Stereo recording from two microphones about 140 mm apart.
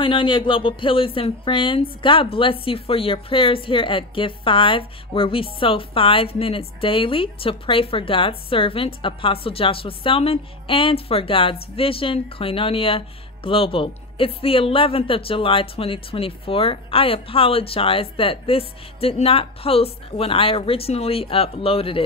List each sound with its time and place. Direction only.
0.0 s a woman's voice: 40° left (ahead or behind)